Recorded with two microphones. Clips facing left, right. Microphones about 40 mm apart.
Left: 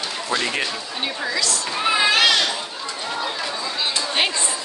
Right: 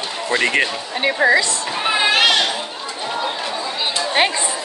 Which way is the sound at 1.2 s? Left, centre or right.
Right.